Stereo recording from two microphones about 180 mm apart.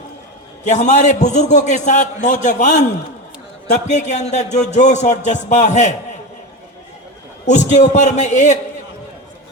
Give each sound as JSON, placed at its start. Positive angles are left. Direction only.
{"t": 0.6, "sound": "a man's voice", "side_deg": 40}
{"t": 7.4, "sound": "speech", "side_deg": 40}